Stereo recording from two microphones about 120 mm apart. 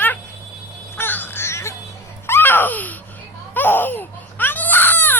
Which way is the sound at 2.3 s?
20° left (ahead or behind).